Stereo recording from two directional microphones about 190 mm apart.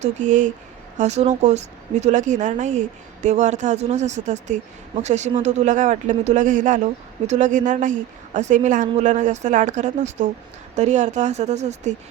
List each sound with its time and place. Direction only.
0.0 s speech: 40° right (ahead or behind)